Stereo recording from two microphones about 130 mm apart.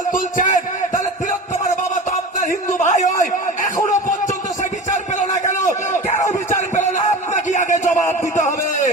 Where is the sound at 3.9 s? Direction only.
75° left (ahead or behind).